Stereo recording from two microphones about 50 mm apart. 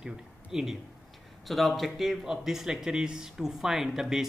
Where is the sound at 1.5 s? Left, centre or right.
Centre.